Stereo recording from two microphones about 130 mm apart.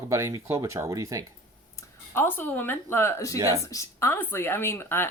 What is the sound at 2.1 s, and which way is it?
A woman's voice, 15° left (ahead or behind).